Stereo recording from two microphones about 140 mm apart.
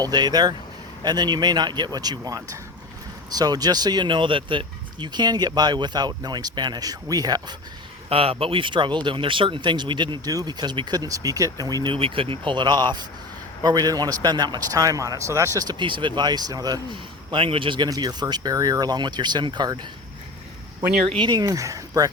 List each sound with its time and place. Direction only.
0.0 s a man's voice: 30° right (ahead or behind)
8.1 s a man's voice: 40° right (ahead or behind)
21.2 s a man's voice: 30° right (ahead or behind)